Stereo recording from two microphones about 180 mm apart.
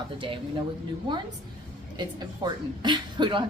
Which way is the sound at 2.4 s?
25° right (ahead or behind).